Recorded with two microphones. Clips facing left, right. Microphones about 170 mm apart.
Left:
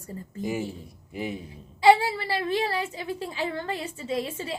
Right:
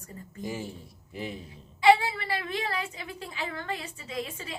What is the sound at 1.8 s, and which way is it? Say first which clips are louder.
A woman's voice: left 2 dB; 30° left (ahead or behind).